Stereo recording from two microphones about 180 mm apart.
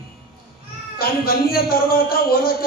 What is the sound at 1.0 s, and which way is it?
A woman's voice, 55° left (ahead or behind).